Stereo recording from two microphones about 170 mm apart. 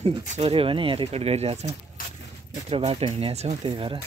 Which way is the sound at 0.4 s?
35° right (ahead or behind).